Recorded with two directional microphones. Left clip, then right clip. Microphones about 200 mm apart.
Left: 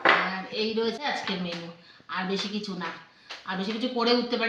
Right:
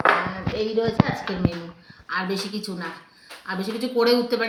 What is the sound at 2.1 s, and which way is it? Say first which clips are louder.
A woman's voice: right 4 dB; 10° left (ahead or behind).